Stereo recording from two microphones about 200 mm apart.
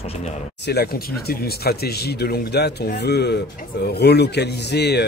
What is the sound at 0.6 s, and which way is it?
A man's voice, 50° left (ahead or behind).